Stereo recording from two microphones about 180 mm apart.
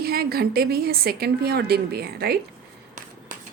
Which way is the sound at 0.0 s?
60° right (ahead or behind).